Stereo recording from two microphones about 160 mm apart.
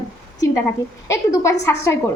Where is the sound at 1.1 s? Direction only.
20° left (ahead or behind).